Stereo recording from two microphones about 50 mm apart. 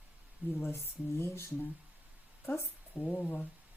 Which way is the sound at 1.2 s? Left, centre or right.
Left.